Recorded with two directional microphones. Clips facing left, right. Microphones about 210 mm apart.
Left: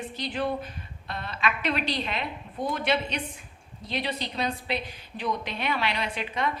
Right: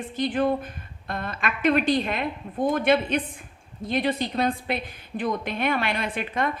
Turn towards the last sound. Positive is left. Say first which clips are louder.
# right 3 dB
turn(degrees=-50)  # may be behind; listen again after turning